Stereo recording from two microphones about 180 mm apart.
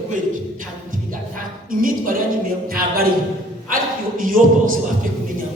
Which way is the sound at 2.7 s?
55° right (ahead or behind).